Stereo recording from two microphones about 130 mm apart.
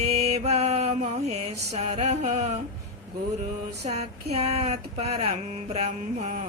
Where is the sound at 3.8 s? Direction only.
55° right (ahead or behind).